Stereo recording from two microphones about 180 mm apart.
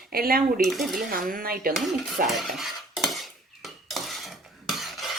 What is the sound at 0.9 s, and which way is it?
Speech, 55° right (ahead or behind).